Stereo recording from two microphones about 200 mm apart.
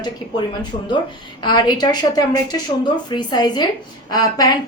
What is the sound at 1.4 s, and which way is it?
A woman's voice, 20° left (ahead or behind).